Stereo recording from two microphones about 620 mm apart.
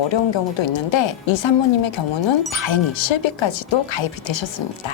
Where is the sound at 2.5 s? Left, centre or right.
Left.